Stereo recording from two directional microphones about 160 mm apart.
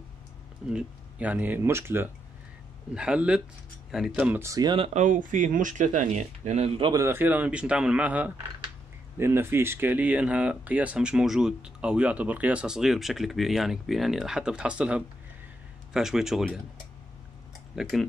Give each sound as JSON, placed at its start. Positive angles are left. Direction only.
{"t": 0.7, "sound": "speech", "side_deg": -5}
{"t": 2.9, "sound": "speech", "side_deg": -5}
{"t": 4.7, "sound": "speech", "side_deg": -35}
{"t": 5.0, "sound": "speech", "side_deg": -55}
{"t": 6.8, "sound": "speech", "side_deg": -20}
{"t": 17.7, "sound": "speech", "side_deg": 0}